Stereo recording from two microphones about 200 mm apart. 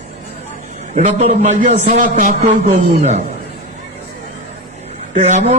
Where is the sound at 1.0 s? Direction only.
35° right (ahead or behind).